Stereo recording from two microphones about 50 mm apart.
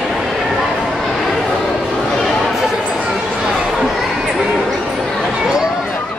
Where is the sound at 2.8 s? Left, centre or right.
Centre.